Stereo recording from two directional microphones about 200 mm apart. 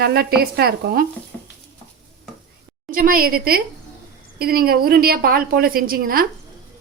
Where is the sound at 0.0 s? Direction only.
50° right (ahead or behind).